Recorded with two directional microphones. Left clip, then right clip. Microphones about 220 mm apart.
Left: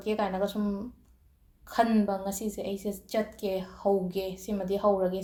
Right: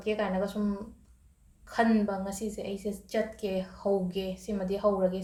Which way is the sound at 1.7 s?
35° left (ahead or behind).